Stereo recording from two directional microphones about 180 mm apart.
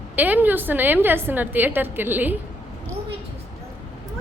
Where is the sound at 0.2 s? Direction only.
10° right (ahead or behind).